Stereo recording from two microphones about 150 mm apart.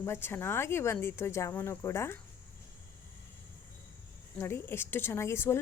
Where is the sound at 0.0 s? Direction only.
15° left (ahead or behind).